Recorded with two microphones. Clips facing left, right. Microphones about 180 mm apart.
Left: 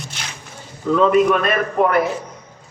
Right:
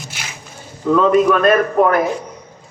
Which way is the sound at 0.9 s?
45° right (ahead or behind).